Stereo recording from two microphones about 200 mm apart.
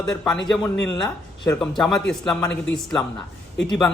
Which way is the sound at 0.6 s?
15° left (ahead or behind).